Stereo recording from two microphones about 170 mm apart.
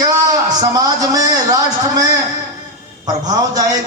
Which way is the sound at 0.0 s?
20° right (ahead or behind).